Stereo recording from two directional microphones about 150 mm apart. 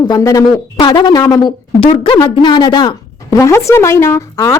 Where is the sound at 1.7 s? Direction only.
35° left (ahead or behind); by 4.6 s 20° left (ahead or behind).